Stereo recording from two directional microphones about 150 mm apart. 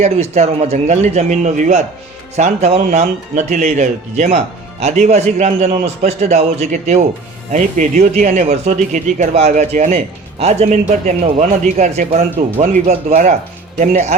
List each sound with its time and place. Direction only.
0.0 s speech: 45° right (ahead or behind)